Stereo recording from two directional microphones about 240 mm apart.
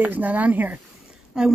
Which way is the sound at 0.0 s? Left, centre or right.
Centre.